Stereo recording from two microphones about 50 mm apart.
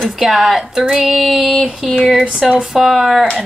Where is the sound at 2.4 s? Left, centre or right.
Centre.